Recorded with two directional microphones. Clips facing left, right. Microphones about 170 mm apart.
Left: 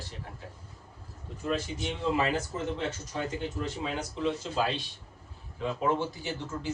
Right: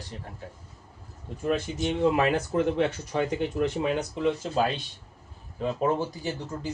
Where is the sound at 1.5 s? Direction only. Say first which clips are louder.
Right 5 dB; 55° right (ahead or behind).